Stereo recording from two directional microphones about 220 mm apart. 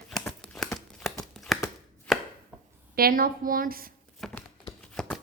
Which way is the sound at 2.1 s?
5° left (ahead or behind).